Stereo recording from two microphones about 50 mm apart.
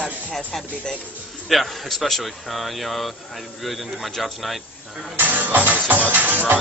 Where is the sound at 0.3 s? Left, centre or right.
Centre.